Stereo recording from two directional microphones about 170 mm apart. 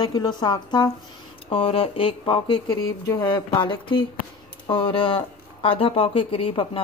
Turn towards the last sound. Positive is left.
turn(degrees=30)  # may be behind; listen again after turning